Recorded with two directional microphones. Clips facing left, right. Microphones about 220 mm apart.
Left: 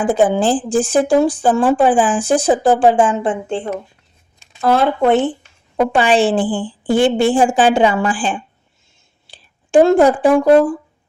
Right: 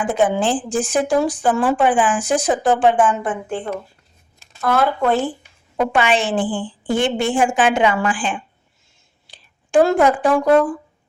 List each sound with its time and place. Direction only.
0.0 s a woman's voice: 30° left (ahead or behind)
6.4 s a woman's voice: centre (ahead or behind)
6.8 s a woman's voice: 30° left (ahead or behind)